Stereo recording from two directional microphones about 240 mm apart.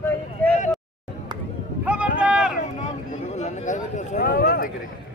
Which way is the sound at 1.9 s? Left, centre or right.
Centre.